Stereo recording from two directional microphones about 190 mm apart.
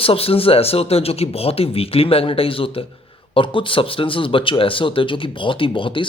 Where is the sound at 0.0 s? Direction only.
30° left (ahead or behind).